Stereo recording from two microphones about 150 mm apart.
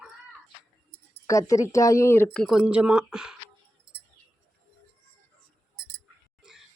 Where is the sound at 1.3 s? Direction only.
20° left (ahead or behind).